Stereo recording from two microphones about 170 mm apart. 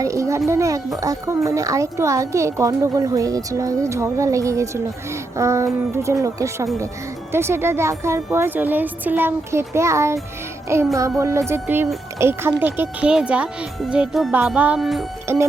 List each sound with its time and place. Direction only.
0.0 s a woman's voice: 20° right (ahead or behind); by 15.0 s centre (ahead or behind)
15.3 s a woman's voice: 15° right (ahead or behind)